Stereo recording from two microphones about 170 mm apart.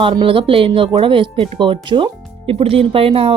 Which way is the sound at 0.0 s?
30° right (ahead or behind).